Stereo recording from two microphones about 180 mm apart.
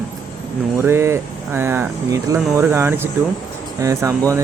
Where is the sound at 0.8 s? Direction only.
15° right (ahead or behind).